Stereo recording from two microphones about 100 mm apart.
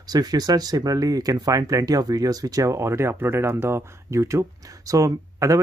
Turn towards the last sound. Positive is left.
turn(degrees=-35)  # may be behind; listen again after turning